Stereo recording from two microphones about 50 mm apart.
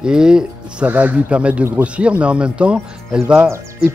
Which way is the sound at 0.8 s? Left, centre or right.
Right.